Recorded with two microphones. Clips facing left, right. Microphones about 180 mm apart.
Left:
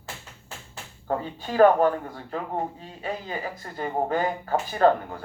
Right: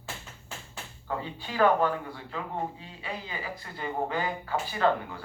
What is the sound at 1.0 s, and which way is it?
Speech, 45° left (ahead or behind).